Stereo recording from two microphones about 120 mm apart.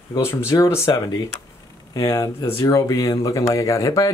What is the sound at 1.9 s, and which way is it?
Speech, 30° left (ahead or behind).